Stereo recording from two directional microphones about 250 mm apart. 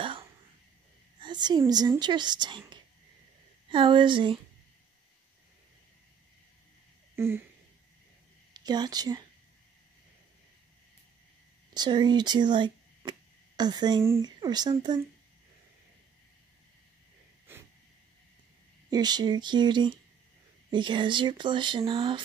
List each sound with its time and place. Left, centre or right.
1.2 s a woman's voice: centre
7.2 s speech: centre
8.5 s a woman's voice: centre
11.7 s a woman's voice: centre
17.5 s wheeze: centre
18.9 s a woman's voice: centre